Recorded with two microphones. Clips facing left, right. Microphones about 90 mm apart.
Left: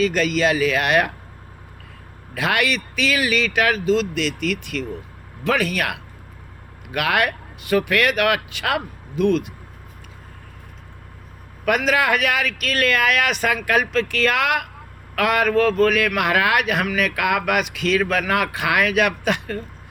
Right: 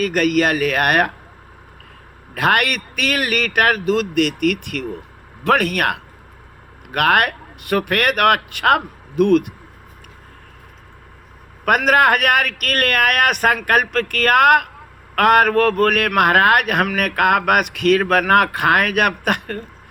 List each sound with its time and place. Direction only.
0.0 s a man's voice: 55° right (ahead or behind)
2.3 s a man's voice: 50° right (ahead or behind)
11.6 s a man's voice: 55° right (ahead or behind)